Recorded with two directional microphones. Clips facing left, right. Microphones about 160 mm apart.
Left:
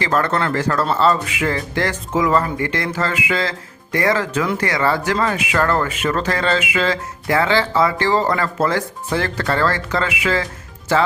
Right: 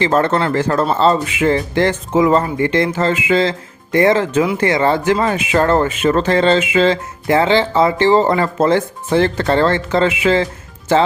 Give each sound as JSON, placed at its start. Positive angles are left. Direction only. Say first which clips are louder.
{"t": 0.0, "sound": "speech", "louder": "right 4 dB", "side_deg": -25}